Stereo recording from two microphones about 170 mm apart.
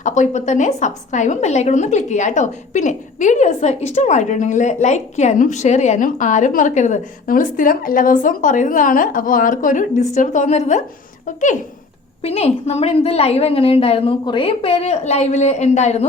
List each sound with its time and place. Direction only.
0.0 s a woman's voice: 45° left (ahead or behind)
12.2 s a woman's voice: 35° left (ahead or behind)